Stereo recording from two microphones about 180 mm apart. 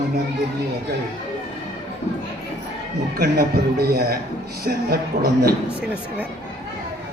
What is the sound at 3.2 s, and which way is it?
A man's voice, 55° right (ahead or behind).